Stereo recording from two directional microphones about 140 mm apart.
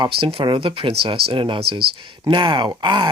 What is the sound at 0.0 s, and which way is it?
Speech, 40° right (ahead or behind).